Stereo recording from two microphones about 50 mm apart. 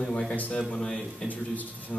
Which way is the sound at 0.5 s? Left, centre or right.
Centre.